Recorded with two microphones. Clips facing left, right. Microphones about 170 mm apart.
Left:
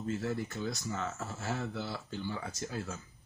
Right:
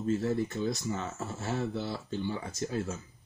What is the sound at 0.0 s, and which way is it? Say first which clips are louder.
Speech: right 6 dB; 20° right (ahead or behind).